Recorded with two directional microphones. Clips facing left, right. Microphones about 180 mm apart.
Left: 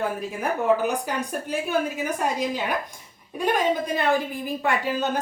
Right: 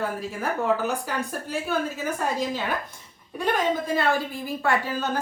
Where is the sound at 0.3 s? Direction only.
15° left (ahead or behind).